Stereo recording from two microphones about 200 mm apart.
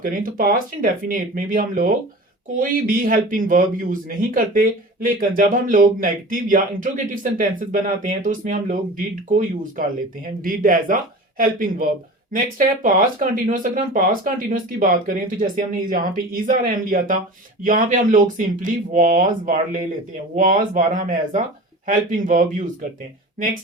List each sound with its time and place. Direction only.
0.0 s a man's voice: 45° right (ahead or behind)
10.4 s a man's voice: 45° right (ahead or behind)